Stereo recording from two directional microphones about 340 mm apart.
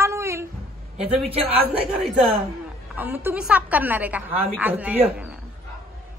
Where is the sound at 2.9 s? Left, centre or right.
Centre.